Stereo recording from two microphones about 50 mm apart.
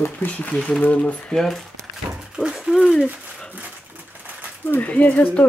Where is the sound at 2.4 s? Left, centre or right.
Centre.